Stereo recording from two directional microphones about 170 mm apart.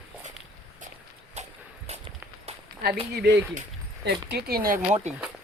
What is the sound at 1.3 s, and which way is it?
Walk, 40° right (ahead or behind).